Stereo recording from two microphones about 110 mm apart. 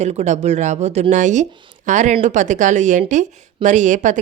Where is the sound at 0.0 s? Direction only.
90° right.